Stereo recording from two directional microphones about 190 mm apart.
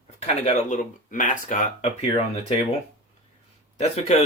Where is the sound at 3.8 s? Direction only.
35° left (ahead or behind).